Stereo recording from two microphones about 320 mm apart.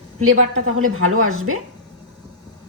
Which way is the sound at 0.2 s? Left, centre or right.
Right.